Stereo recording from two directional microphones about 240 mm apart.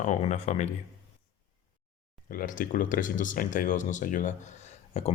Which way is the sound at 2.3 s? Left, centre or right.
Left.